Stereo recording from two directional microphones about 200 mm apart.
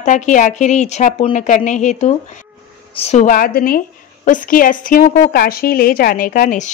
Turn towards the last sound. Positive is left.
turn(degrees=40)  # may be behind; listen again after turning